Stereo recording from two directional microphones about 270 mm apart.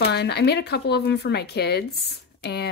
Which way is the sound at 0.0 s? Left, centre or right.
Left.